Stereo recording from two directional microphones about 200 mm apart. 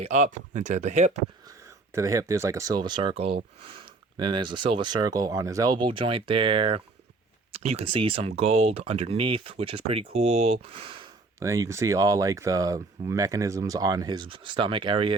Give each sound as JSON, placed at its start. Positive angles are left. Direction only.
{"t": 0.0, "sound": "speech", "side_deg": -35}
{"t": 1.5, "sound": "speech", "side_deg": -15}
{"t": 11.3, "sound": "speech", "side_deg": -15}